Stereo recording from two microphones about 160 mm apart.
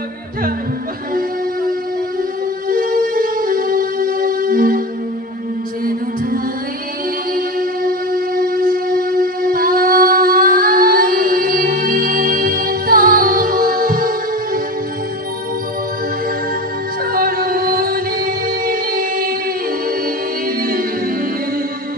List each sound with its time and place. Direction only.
2.7 s music: 65° right (ahead or behind)
7.3 s music: 65° right (ahead or behind)
17.1 s music: 65° right (ahead or behind)